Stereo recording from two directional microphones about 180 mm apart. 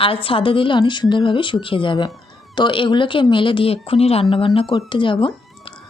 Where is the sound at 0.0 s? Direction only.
30° left (ahead or behind).